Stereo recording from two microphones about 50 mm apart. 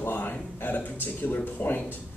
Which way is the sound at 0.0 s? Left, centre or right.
Left.